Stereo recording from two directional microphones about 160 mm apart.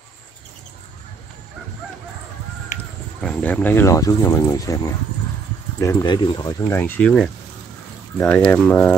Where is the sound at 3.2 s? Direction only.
10° left (ahead or behind).